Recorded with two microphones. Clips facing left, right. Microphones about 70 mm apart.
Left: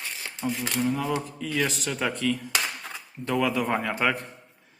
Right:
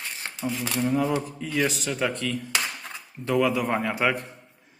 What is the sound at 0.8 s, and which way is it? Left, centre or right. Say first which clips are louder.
Speech: right 3 dB; right.